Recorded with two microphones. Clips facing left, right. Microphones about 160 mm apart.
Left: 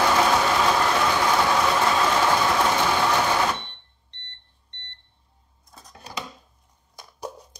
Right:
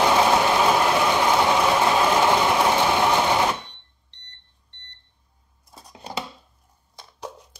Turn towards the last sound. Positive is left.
turn(degrees=10)  # may be behind; listen again after turning